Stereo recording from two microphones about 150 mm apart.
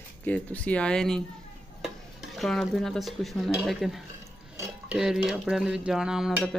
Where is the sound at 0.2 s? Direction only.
10° left (ahead or behind).